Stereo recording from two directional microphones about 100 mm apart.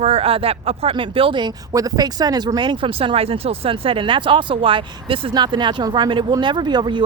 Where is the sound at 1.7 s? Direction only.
40° right (ahead or behind).